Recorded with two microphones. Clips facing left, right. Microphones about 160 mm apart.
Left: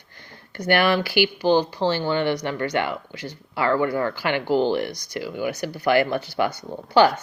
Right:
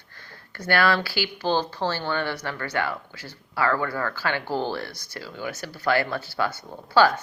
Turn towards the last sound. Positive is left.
turn(degrees=20)  # may be behind; listen again after turning